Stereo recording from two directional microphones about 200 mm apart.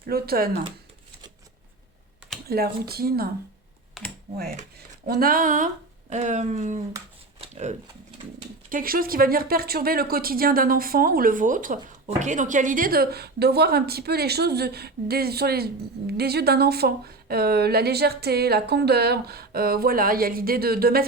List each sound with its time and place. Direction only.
0.0 s speech: 50° right (ahead or behind)
2.5 s speech: 50° right (ahead or behind)
4.0 s speech: centre (ahead or behind)
5.0 s speech: 50° right (ahead or behind)
7.4 s a sound: 35° right (ahead or behind)
8.7 s speech: 45° right (ahead or behind)